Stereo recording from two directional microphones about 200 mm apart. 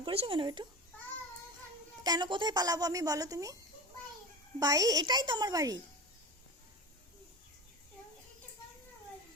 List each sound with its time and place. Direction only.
0.0 s speech: 25° right (ahead or behind)
2.0 s speech: 20° right (ahead or behind)
4.6 s speech: 20° right (ahead or behind)